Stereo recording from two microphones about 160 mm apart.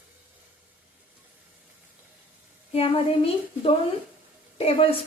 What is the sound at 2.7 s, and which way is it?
A woman's voice, 40° left (ahead or behind).